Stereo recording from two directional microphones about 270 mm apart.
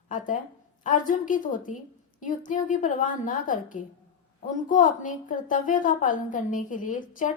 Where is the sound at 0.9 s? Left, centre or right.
Left.